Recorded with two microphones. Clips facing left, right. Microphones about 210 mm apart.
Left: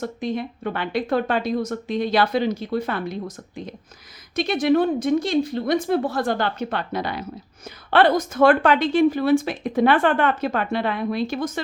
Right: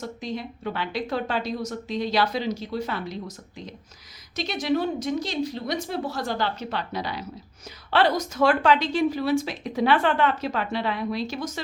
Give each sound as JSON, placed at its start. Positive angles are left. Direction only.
{"t": 0.0, "sound": "a woman's voice", "side_deg": 55}